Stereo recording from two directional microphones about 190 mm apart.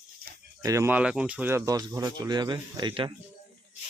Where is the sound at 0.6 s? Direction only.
15° right (ahead or behind).